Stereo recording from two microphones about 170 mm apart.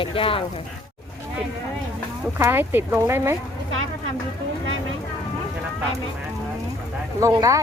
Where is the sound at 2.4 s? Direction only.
10° right (ahead or behind).